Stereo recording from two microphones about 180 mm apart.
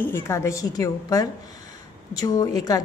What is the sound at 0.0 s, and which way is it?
A woman's voice, 15° left (ahead or behind).